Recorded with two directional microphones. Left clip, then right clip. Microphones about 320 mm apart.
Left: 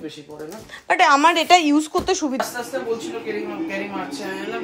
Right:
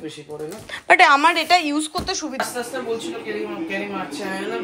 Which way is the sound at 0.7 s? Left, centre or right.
Centre.